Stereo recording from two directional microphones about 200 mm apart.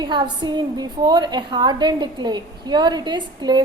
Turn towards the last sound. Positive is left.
turn(degrees=-20)  # may be behind; listen again after turning